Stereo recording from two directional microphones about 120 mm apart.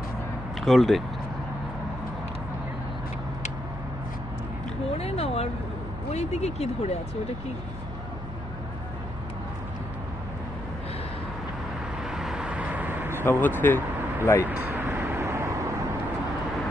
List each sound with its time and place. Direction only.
0.6 s speech: centre (ahead or behind)
4.9 s a sound: 55° left (ahead or behind)
6.1 s speech: 65° left (ahead or behind)
12.0 s vehicle: 5° right (ahead or behind)
13.1 s speech: 20° left (ahead or behind)
14.4 s vehicle: 15° right (ahead or behind)